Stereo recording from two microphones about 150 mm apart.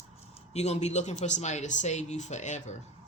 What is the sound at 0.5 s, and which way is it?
Speech, 45° left (ahead or behind).